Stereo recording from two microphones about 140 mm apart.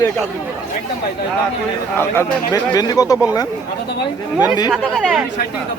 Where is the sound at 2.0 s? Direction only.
20° left (ahead or behind).